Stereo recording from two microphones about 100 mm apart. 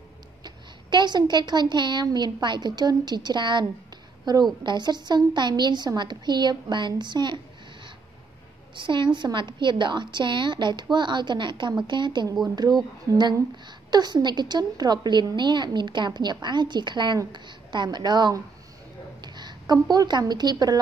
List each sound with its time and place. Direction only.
0.4 s a woman's voice: 50° right (ahead or behind)
8.7 s a woman's voice: 55° right (ahead or behind)
13.8 s a woman's voice: 45° right (ahead or behind)
19.2 s a sound: 45° right (ahead or behind)
19.6 s speech: 40° right (ahead or behind)